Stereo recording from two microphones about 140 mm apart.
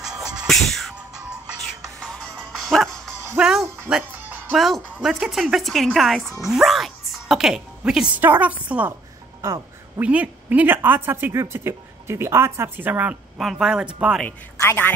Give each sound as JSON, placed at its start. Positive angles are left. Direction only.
{"t": 0.3, "sound": "music", "side_deg": 0}
{"t": 3.9, "sound": "speech", "side_deg": -5}
{"t": 9.4, "sound": "music", "side_deg": -20}
{"t": 10.0, "sound": "speech", "side_deg": -10}
{"t": 14.2, "sound": "a man's voice", "side_deg": 15}